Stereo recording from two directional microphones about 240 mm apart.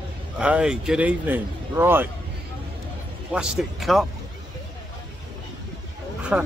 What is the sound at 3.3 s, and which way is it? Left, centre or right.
Speech, centre.